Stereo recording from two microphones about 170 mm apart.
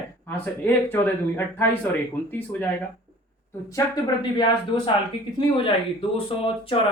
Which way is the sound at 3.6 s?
20° left (ahead or behind).